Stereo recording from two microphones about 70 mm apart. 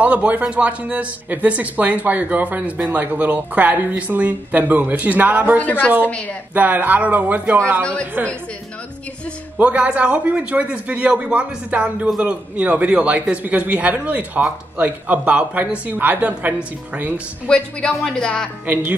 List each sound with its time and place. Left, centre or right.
0.0 s speech: centre
5.6 s a woman's voice: left
6.5 s speech: right
7.8 s speech: centre
9.8 s speech: centre
17.5 s speech: centre